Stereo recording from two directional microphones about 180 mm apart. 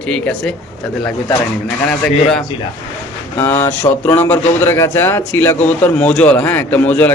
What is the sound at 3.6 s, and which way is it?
A man's voice, 15° left (ahead or behind).